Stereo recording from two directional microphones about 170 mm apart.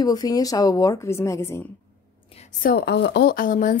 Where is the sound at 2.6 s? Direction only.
70° left (ahead or behind); by 3.7 s 50° left (ahead or behind).